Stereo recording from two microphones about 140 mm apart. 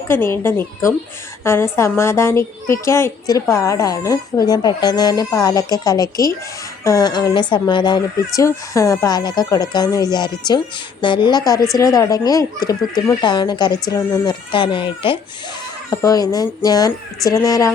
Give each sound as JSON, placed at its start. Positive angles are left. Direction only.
{"t": 0.1, "sound": "speech", "side_deg": 15}
{"t": 15.9, "sound": "speech", "side_deg": 25}